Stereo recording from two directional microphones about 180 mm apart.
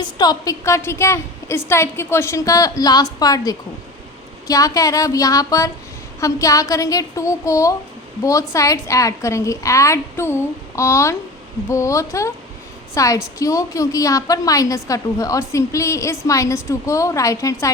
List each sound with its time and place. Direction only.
0.0 s a woman's voice: 20° left (ahead or behind)